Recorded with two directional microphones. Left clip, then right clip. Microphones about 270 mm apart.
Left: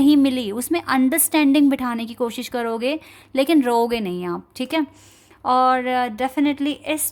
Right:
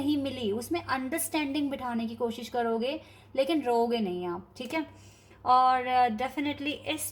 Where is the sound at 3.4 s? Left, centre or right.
Left.